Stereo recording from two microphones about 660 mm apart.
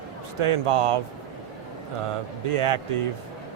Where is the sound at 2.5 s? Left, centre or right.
Right.